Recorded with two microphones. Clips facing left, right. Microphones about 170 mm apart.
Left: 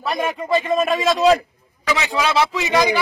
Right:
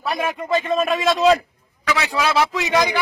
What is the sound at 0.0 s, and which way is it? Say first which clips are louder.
Speech: left 1 dB; centre (ahead or behind).